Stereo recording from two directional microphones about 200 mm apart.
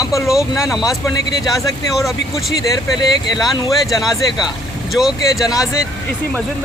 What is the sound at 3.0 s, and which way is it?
Speech, 20° left (ahead or behind).